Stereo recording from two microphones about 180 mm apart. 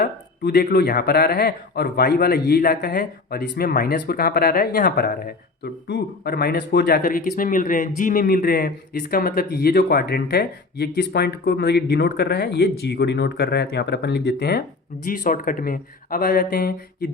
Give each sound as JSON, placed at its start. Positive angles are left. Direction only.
{"t": 0.0, "sound": "speech", "side_deg": 55}
{"t": 15.0, "sound": "speech", "side_deg": 50}